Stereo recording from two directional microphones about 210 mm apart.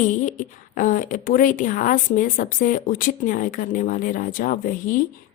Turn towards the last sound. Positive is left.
turn(degrees=40)  # may be behind; listen again after turning